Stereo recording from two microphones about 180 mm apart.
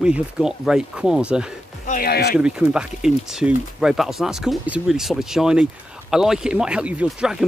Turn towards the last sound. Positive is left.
turn(degrees=-5)  # may be behind; listen again after turning